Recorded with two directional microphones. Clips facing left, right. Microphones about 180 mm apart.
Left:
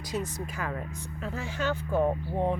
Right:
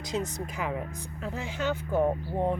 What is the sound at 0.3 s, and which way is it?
Speech, 15° right (ahead or behind).